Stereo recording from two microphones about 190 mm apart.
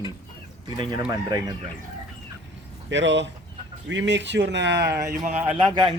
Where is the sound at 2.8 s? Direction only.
70° right (ahead or behind).